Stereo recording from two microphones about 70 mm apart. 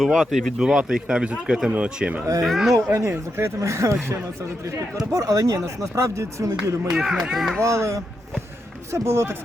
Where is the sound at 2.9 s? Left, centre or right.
Right.